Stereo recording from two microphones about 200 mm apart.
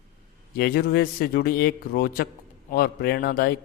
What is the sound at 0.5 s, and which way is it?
A man's voice, 50° left (ahead or behind).